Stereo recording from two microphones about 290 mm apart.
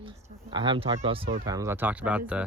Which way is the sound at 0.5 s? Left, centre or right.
Centre.